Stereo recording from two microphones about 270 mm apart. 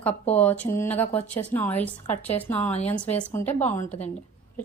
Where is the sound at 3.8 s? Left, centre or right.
Left.